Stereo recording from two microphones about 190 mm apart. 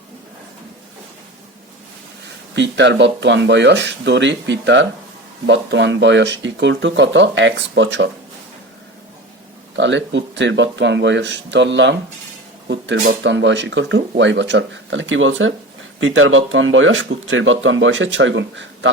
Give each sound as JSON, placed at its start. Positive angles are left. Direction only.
{"t": 2.6, "sound": "speech", "side_deg": -65}
{"t": 9.7, "sound": "speech", "side_deg": -70}